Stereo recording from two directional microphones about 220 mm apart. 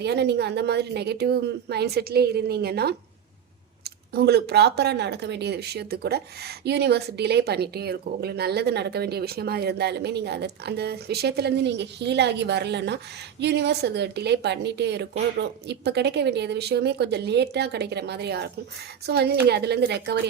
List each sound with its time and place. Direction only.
0.0 s speech: 50° right (ahead or behind)
4.1 s speech: 45° right (ahead or behind)